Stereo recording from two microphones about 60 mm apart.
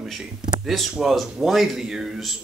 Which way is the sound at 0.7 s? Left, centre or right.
Centre.